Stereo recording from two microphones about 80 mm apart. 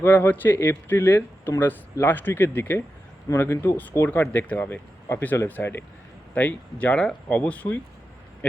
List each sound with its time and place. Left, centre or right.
0.0 s speech: left